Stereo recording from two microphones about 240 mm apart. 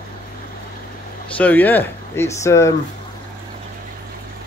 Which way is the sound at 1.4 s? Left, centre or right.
Centre.